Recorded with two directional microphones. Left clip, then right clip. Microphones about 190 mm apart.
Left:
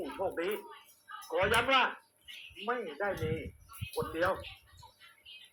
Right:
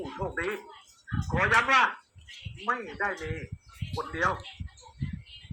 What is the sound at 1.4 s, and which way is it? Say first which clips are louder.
Speech: right 5 dB; 10° right (ahead or behind).